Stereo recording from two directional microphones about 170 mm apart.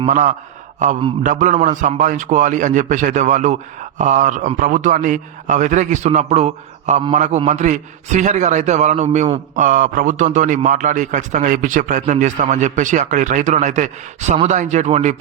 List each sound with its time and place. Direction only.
0.0 s a man's voice: 45° right (ahead or behind)